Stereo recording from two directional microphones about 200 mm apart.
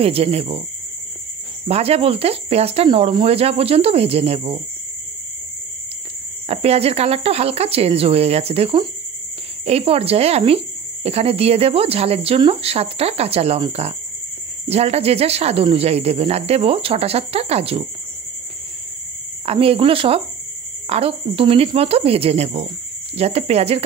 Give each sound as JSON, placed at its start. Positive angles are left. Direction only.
{"t": 0.0, "sound": "speech", "side_deg": -30}
{"t": 1.7, "sound": "speech", "side_deg": -30}
{"t": 6.4, "sound": "speech", "side_deg": -30}
{"t": 19.4, "sound": "speech", "side_deg": -30}